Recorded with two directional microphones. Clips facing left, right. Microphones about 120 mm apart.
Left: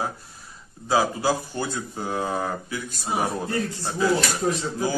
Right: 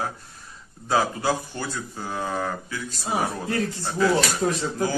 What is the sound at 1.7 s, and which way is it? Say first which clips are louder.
Speech: left 3 dB; 20° left (ahead or behind).